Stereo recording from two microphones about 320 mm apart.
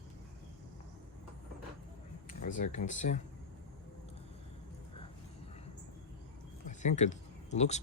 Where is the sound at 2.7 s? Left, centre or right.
Left.